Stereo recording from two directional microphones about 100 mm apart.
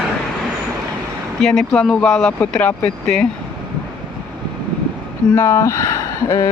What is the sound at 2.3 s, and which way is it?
Speech, 20° left (ahead or behind).